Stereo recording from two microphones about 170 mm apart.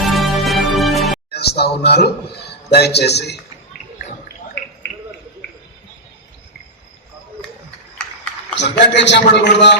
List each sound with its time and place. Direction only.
0.0 s music: centre (ahead or behind)
1.3 s a man's voice: 70° left (ahead or behind)
8.5 s a man's voice: 85° left